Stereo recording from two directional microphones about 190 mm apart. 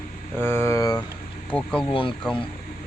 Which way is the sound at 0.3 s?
10° left (ahead or behind).